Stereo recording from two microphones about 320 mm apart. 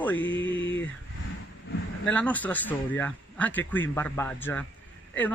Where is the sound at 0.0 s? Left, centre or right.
Centre.